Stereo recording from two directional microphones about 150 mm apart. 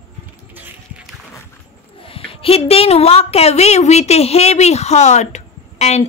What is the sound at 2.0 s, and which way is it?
A woman's voice, 40° left (ahead or behind).